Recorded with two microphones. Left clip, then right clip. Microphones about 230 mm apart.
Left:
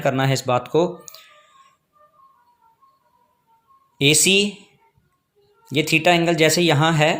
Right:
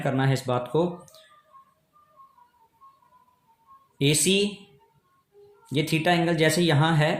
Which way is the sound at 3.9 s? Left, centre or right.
Left.